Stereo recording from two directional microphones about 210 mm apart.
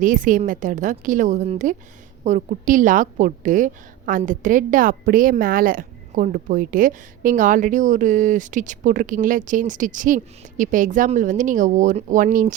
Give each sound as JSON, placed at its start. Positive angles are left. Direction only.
{"t": 0.0, "sound": "a woman's voice", "side_deg": -40}